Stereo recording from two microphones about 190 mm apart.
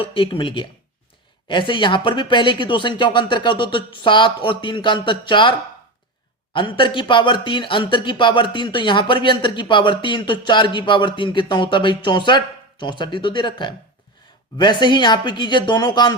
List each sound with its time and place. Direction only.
0.0 s speech: 25° left (ahead or behind)